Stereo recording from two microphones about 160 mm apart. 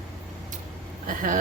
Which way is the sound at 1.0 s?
60° right (ahead or behind).